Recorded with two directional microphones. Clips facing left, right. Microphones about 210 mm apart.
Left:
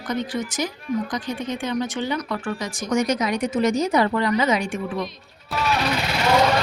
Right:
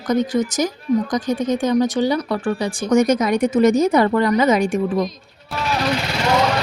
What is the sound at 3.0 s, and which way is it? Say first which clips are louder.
Speech: right 6 dB; 50° right (ahead or behind).